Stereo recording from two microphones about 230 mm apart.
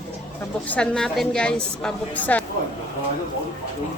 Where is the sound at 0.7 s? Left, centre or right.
Centre.